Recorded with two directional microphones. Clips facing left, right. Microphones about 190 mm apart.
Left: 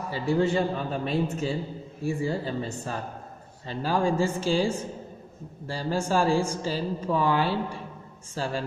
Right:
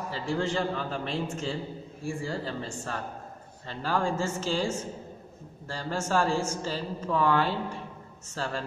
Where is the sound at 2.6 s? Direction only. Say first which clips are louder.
Left 2 dB; 15° left (ahead or behind).